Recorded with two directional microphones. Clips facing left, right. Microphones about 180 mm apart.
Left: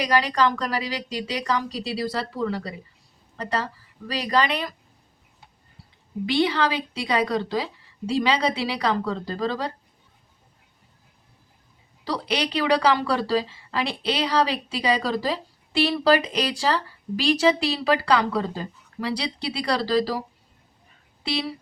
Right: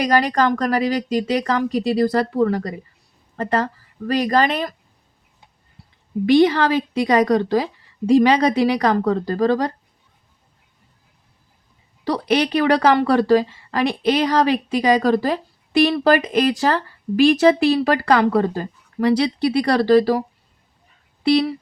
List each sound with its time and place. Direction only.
0.0 s a woman's voice: 50° right (ahead or behind)
6.2 s a woman's voice: 50° right (ahead or behind)
12.0 s a woman's voice: 55° right (ahead or behind)